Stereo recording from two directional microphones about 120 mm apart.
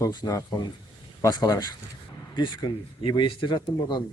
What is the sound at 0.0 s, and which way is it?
Speech, 30° left (ahead or behind).